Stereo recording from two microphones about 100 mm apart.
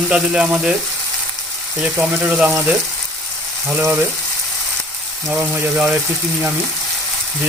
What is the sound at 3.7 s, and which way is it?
Frying, 20° right (ahead or behind).